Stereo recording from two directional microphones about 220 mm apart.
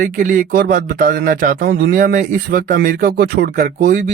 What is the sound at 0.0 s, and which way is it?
A man's voice, 40° right (ahead or behind).